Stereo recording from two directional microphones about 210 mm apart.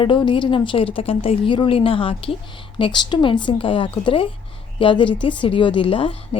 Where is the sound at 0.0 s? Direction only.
25° left (ahead or behind).